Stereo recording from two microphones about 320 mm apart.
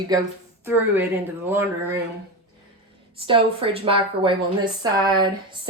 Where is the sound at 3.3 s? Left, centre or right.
Centre.